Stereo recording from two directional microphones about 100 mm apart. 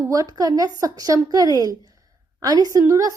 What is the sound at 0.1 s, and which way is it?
A woman's voice, 35° right (ahead or behind).